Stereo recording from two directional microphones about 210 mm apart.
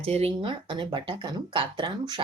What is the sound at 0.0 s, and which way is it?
Speech, 30° right (ahead or behind).